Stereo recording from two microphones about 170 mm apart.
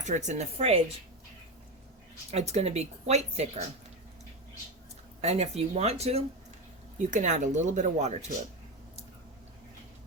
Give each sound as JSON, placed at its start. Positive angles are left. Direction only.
{"t": 0.0, "sound": "speech", "side_deg": -45}
{"t": 2.3, "sound": "speech", "side_deg": -40}
{"t": 5.2, "sound": "speech", "side_deg": -40}